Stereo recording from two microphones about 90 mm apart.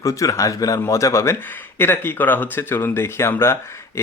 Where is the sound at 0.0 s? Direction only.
35° left (ahead or behind).